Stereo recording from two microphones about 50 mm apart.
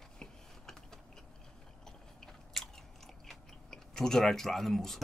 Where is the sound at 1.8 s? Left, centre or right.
Centre.